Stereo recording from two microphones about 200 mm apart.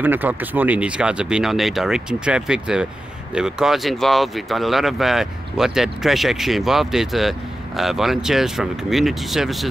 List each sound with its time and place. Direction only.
0.0 s speech: 10° right (ahead or behind)